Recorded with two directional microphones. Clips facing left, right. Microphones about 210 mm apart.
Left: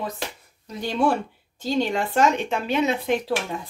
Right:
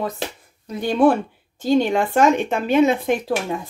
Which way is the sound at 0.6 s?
55° right (ahead or behind).